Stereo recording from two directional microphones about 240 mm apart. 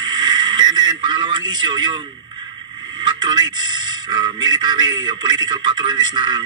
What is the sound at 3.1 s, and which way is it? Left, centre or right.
A man's voice, centre.